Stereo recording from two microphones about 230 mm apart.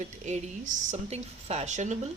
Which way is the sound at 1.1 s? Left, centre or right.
Right.